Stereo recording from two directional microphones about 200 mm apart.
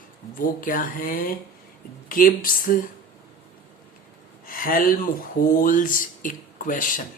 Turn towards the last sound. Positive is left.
turn(degrees=40)  # may be behind; listen again after turning